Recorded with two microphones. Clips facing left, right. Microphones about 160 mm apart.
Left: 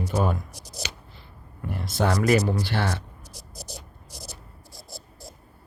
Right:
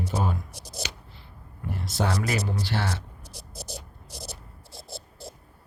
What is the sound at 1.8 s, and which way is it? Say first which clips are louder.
Speech: left 4 dB; 55° left (ahead or behind).